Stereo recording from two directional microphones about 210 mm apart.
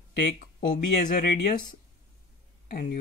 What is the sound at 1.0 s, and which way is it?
Speech, 45° left (ahead or behind).